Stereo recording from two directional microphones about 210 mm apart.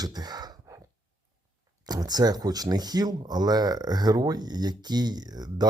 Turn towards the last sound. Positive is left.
turn(degrees=-20)  # may be behind; listen again after turning